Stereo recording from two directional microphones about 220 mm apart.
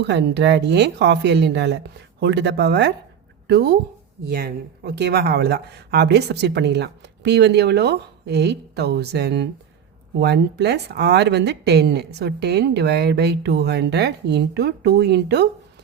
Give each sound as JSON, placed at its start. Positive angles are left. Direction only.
{"t": 0.0, "sound": "speech", "side_deg": -50}